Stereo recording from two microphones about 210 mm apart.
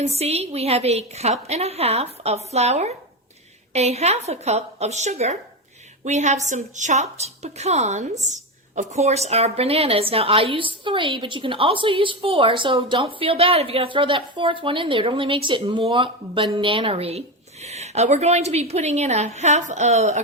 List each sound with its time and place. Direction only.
0.2 s a woman's voice: 30° right (ahead or behind)